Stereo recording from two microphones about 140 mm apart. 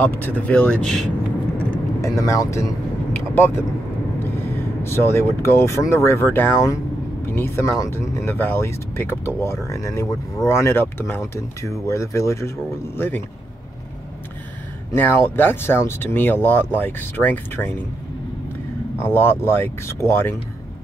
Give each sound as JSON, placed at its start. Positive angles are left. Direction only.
{"t": 0.2, "sound": "speech", "side_deg": 10}
{"t": 2.0, "sound": "speech", "side_deg": 20}
{"t": 4.8, "sound": "speech", "side_deg": 20}
{"t": 15.0, "sound": "speech", "side_deg": 15}
{"t": 19.0, "sound": "speech", "side_deg": 15}